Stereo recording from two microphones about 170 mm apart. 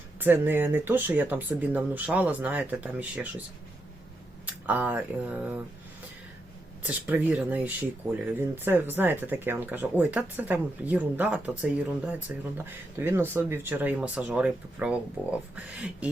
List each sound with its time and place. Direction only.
0.2 s speech: 10° right (ahead or behind)
4.4 s speech: 10° right (ahead or behind)
6.8 s speech: 10° right (ahead or behind)